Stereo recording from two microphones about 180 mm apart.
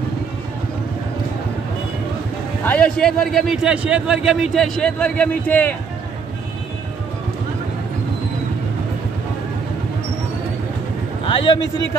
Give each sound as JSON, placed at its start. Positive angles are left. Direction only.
{"t": 2.6, "sound": "a man's voice", "side_deg": 5}
{"t": 11.2, "sound": "a man's voice", "side_deg": 25}